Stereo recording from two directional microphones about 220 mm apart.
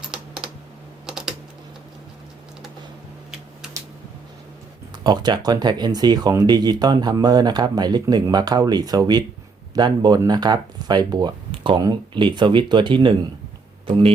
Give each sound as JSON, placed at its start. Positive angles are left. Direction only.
{"t": 0.1, "sound": "typing", "side_deg": -5}
{"t": 5.0, "sound": "speech", "side_deg": -20}